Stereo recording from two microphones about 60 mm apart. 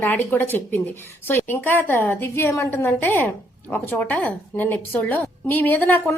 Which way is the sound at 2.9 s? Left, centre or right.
Left.